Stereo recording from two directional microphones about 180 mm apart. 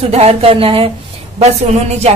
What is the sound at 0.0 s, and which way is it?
Speech, 35° right (ahead or behind).